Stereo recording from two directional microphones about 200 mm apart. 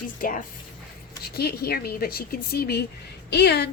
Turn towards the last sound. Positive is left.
turn(degrees=55)  # may be behind; listen again after turning